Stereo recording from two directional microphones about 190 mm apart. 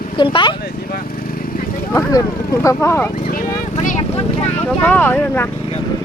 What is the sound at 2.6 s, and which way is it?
Speech, 15° left (ahead or behind).